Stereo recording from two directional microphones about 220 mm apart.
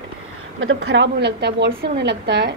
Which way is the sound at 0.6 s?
60° right (ahead or behind).